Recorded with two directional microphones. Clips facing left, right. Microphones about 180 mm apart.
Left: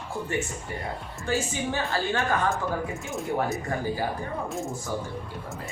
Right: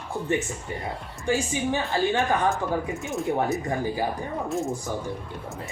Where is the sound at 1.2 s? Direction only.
15° right (ahead or behind).